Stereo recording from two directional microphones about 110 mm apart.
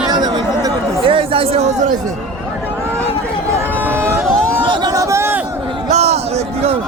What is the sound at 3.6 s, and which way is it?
Vehicle, 20° right (ahead or behind).